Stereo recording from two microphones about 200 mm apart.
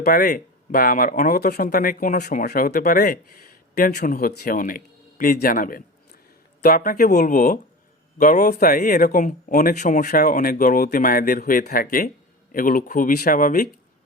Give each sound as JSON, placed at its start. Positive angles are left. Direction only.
{"t": 0.0, "sound": "speech", "side_deg": 50}